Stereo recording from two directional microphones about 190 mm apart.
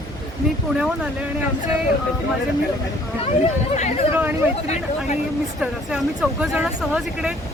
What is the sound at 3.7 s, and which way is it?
Speech, 35° left (ahead or behind).